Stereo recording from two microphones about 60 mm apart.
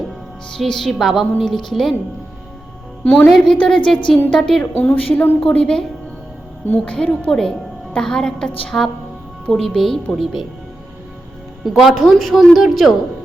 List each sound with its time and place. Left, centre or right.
0.5 s a woman's voice: centre
3.0 s a woman's voice: left
3.2 s a woman's voice: centre
3.6 s a woman's voice: centre
4.8 s speech: left
5.4 s a woman's voice: centre
6.8 s a woman's voice: centre
8.7 s a woman's voice: left
9.5 s a woman's voice: centre
11.6 s a woman's voice: centre